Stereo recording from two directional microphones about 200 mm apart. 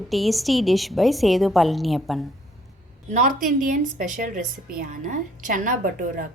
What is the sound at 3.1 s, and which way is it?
A woman's voice, 40° right (ahead or behind).